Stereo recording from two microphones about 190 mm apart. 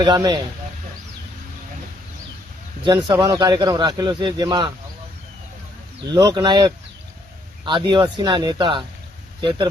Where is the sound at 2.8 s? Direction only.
20° right (ahead or behind).